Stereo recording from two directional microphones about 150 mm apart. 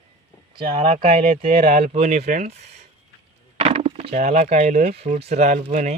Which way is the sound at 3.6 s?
40° right (ahead or behind).